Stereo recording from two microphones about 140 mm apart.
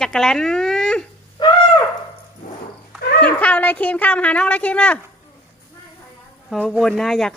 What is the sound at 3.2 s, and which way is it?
A woman's voice, 10° left (ahead or behind).